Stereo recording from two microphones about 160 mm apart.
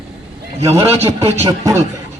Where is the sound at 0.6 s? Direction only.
15° right (ahead or behind).